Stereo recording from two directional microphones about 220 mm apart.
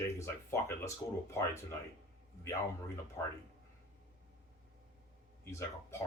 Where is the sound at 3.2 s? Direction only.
15° left (ahead or behind).